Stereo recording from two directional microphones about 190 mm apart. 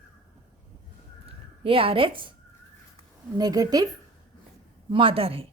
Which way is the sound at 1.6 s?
30° right (ahead or behind).